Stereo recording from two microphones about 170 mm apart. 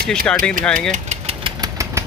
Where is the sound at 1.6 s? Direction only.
20° right (ahead or behind).